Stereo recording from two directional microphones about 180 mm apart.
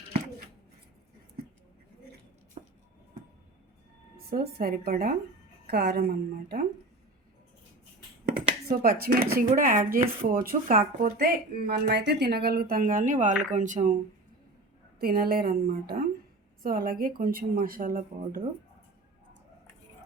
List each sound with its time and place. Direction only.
2.6 s a sound: 30° right (ahead or behind)
4.3 s speech: 55° right (ahead or behind)
8.7 s speech: 55° right (ahead or behind)
14.9 s speech: 55° right (ahead or behind)